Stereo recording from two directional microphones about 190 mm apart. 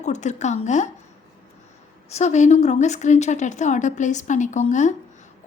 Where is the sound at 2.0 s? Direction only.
35° left (ahead or behind).